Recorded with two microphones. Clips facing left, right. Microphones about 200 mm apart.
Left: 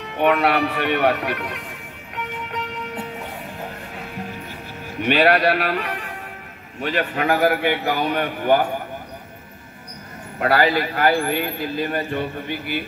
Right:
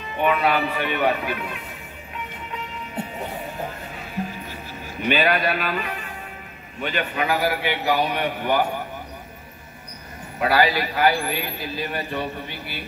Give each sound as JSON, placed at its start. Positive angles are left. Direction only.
{"t": 0.0, "sound": "speech", "side_deg": 65}
{"t": 2.1, "sound": "music", "side_deg": 70}
{"t": 4.9, "sound": "a man's voice", "side_deg": 65}
{"t": 10.4, "sound": "a man's voice", "side_deg": 55}